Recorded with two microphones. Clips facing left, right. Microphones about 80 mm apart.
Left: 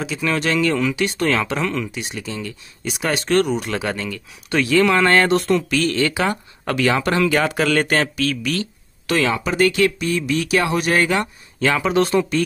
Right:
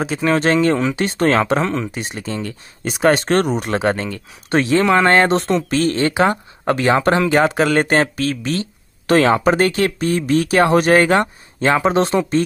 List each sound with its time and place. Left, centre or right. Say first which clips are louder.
0.0 s speech: right 5 dB; right
9.1 s speech: right 6 dB; right